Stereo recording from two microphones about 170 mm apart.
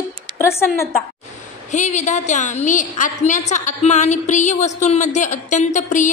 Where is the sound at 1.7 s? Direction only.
45° left (ahead or behind).